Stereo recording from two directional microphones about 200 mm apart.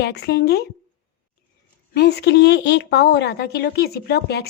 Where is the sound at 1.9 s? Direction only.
55° left (ahead or behind).